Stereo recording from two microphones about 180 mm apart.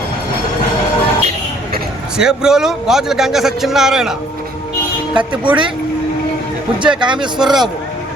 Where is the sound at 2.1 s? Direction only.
5° right (ahead or behind).